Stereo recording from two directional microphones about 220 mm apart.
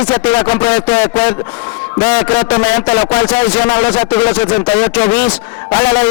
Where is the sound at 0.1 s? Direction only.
15° left (ahead or behind).